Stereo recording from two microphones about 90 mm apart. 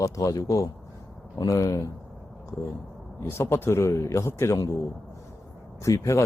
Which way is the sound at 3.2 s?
30° left (ahead or behind).